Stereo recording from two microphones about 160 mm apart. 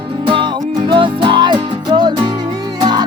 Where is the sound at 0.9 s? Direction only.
30° right (ahead or behind).